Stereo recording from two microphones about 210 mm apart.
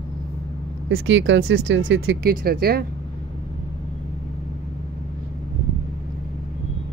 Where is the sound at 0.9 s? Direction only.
65° right (ahead or behind); by 2.9 s 45° right (ahead or behind).